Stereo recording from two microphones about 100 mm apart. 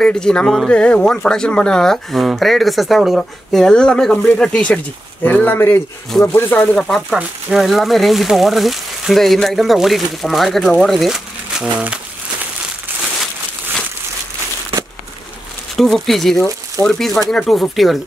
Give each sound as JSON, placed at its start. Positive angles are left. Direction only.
{"t": 0.0, "sound": "speech", "side_deg": 10}
{"t": 6.8, "sound": "speech", "side_deg": 5}
{"t": 15.7, "sound": "speech", "side_deg": 0}